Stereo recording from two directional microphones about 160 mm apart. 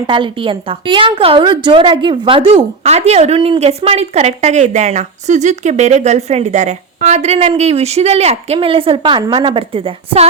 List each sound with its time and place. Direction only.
0.1 s a woman's voice: 30° right (ahead or behind)